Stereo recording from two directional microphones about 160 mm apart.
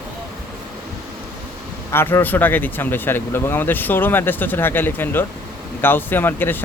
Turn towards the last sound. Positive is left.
turn(degrees=10)  # may be behind; listen again after turning